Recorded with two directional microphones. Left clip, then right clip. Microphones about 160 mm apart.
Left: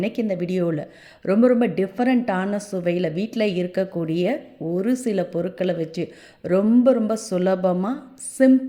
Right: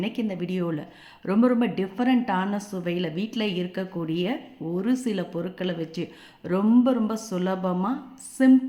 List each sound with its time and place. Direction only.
0.0 s a woman's voice: 30° left (ahead or behind)